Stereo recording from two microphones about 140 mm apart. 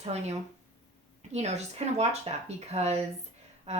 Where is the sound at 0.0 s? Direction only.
50° right (ahead or behind).